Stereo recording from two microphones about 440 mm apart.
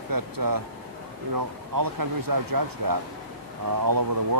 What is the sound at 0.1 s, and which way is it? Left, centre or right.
Speech, right.